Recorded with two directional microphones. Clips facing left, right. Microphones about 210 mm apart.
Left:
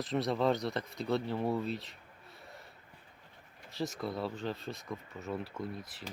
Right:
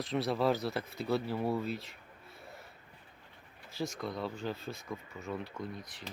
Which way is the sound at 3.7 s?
Centre (ahead or behind).